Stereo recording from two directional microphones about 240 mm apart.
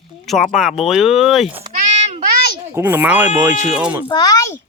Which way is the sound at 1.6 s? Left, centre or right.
Right.